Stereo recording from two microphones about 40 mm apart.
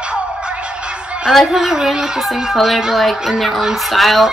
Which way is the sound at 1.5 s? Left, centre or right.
Centre.